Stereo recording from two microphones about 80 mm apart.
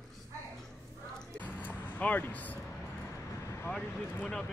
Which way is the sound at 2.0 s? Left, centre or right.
Left.